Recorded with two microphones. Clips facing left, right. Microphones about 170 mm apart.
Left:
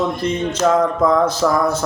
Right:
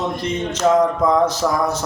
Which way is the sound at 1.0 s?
15° right (ahead or behind).